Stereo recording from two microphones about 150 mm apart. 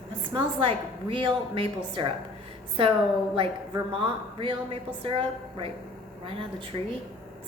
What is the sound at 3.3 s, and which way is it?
A woman's voice, 35° right (ahead or behind).